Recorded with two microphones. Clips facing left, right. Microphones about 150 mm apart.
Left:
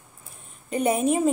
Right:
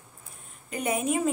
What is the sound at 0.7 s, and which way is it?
Speech, 30° left (ahead or behind).